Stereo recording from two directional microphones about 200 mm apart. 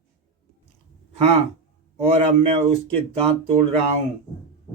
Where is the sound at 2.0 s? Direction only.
30° right (ahead or behind).